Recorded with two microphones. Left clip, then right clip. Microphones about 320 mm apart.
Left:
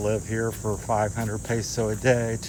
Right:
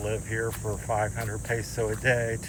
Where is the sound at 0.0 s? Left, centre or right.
Left.